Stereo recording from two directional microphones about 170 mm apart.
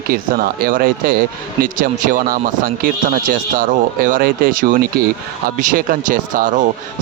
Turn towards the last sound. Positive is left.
turn(degrees=-50)  # may be behind; listen again after turning